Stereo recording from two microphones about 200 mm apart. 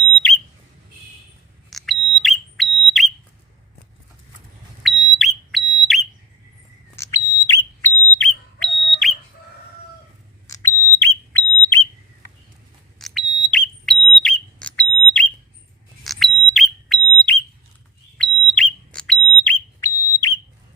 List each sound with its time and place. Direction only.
1.7 s alarm: centre (ahead or behind)
4.8 s alarm: centre (ahead or behind)
6.9 s whistle: 15° left (ahead or behind)
10.4 s smoke detector: 15° left (ahead or behind)
13.0 s smoke detector: centre (ahead or behind)
16.0 s a sound: centre (ahead or behind)
18.2 s fire alarm: 5° left (ahead or behind)
19.8 s whistle: 15° left (ahead or behind)